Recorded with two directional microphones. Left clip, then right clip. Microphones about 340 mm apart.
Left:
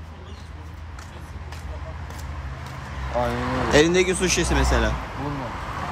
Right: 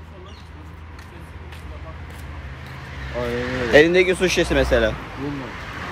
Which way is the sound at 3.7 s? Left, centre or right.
Centre.